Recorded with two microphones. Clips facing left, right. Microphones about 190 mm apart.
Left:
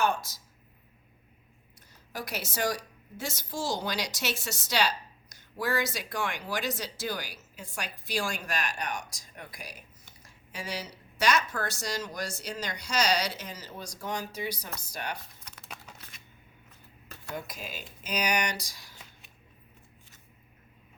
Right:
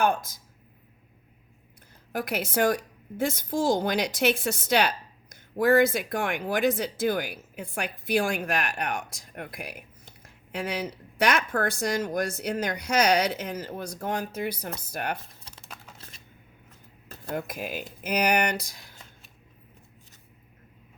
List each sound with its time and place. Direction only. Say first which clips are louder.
0.0 s speech: right 4 dB; 55° right (ahead or behind)
2.1 s a woman's voice: right 8 dB; 55° right (ahead or behind)
17.3 s a woman's voice: right 7 dB; 55° right (ahead or behind)